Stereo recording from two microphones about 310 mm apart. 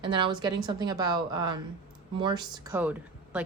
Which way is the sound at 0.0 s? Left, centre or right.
Centre.